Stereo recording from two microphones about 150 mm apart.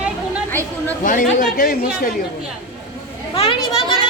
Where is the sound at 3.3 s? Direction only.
35° left (ahead or behind).